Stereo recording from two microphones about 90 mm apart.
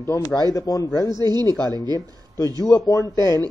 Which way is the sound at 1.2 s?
50° right (ahead or behind).